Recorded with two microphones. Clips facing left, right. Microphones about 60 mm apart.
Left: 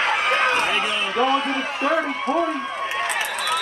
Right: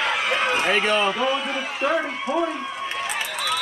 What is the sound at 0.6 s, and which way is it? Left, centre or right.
Speech, right.